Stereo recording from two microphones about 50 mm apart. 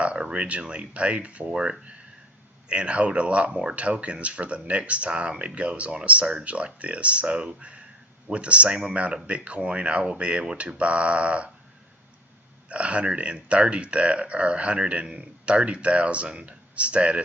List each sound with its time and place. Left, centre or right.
0.0 s speech: right
12.6 s speech: right